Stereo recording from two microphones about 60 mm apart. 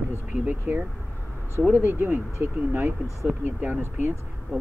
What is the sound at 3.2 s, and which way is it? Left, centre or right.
Speech, right.